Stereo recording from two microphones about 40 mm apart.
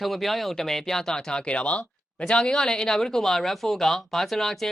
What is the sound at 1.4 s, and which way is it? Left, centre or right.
Speech, left.